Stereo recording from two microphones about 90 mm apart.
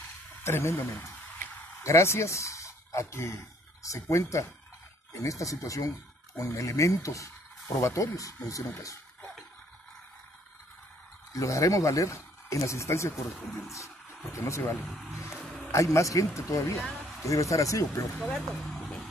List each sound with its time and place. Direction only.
0.4 s speech: 30° left (ahead or behind)
11.3 s speech: 35° left (ahead or behind)
13.1 s speech: 5° right (ahead or behind)
13.7 s speech: 35° left (ahead or behind)
14.9 s speech: centre (ahead or behind)
15.2 s a sound: centre (ahead or behind)
15.7 s speech: 35° left (ahead or behind)
18.1 s speech: 5° left (ahead or behind)